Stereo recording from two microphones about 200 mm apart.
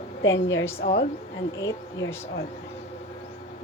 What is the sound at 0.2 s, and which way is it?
Speech, 65° left (ahead or behind).